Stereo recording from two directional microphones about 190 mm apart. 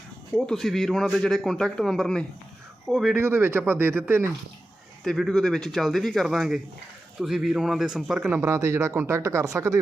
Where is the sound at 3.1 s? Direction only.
10° right (ahead or behind).